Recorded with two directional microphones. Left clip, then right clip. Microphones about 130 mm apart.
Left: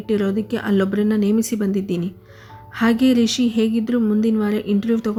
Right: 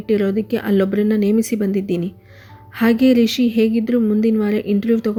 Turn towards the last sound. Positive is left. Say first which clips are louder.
# right 3 dB
turn(degrees=-30)  # may be behind; listen again after turning